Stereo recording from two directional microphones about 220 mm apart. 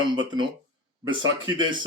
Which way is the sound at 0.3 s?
20° right (ahead or behind).